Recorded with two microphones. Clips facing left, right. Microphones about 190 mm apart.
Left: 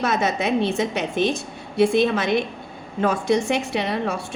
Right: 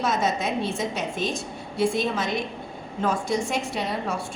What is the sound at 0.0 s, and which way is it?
A woman's voice, 65° left (ahead or behind).